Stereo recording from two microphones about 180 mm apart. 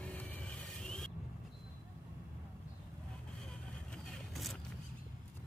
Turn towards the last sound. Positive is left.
turn(degrees=0)  # may be behind; listen again after turning